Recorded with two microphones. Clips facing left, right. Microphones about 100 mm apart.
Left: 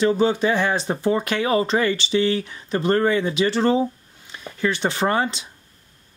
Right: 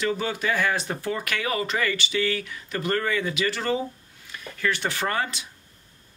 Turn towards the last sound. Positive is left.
turn(degrees=25)  # may be behind; listen again after turning